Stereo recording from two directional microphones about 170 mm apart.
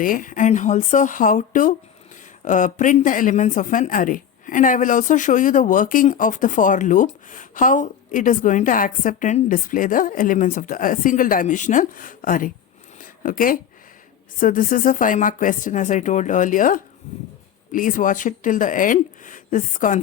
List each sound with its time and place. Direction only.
0.0 s speech: 55° left (ahead or behind)